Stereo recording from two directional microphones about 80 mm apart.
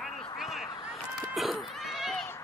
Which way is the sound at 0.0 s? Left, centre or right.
Centre.